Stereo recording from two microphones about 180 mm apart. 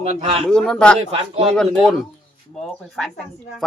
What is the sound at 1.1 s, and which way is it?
Speech, 35° right (ahead or behind).